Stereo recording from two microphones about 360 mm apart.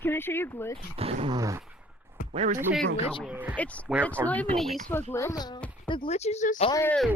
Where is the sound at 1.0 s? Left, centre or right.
Centre.